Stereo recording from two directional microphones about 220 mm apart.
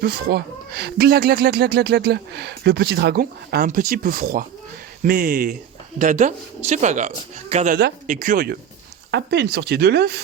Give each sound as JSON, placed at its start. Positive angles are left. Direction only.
{"t": 0.0, "sound": "speech", "side_deg": -45}